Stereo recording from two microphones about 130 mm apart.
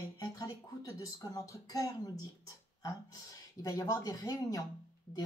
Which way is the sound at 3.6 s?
30° left (ahead or behind).